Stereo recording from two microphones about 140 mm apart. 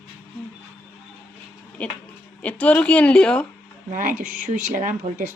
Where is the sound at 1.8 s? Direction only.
10° left (ahead or behind).